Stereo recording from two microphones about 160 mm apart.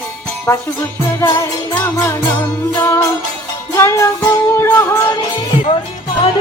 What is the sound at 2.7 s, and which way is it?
Music, 15° left (ahead or behind).